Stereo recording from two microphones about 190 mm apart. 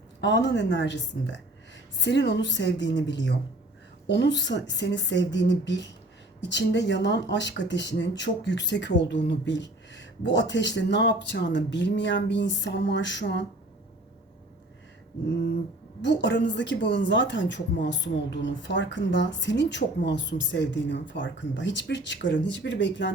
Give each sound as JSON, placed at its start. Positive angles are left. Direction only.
{"t": 0.2, "sound": "a woman's voice", "side_deg": 65}
{"t": 16.0, "sound": "a woman's voice", "side_deg": 70}